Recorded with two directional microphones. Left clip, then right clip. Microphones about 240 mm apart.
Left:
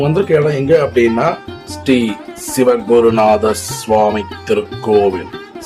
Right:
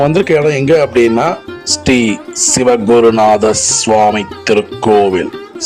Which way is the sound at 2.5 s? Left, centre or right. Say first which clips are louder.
Right 1 dB; right.